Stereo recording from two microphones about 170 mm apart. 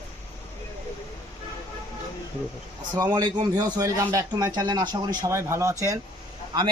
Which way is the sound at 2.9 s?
25° right (ahead or behind).